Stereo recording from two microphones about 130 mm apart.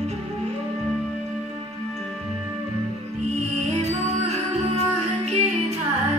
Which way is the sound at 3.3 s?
55° right (ahead or behind).